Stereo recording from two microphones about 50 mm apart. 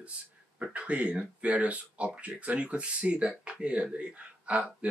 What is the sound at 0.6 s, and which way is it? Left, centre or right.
Speech, right.